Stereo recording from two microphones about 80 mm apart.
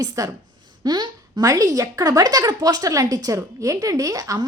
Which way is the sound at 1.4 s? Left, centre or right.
Right.